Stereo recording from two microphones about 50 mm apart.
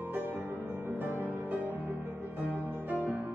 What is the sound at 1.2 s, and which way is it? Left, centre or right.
Music, right.